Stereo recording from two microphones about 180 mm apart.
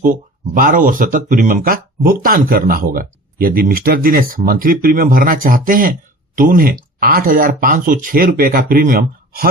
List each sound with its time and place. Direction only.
0.0 s speech: 50° right (ahead or behind)